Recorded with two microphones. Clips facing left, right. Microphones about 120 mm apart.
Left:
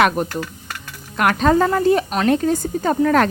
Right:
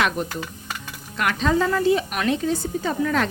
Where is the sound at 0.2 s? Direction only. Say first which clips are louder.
Left 5 dB; 45° left (ahead or behind).